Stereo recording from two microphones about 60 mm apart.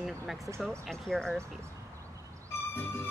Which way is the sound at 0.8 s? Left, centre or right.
Centre.